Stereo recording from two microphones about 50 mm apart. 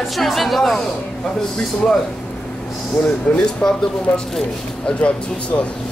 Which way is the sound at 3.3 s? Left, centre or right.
Centre.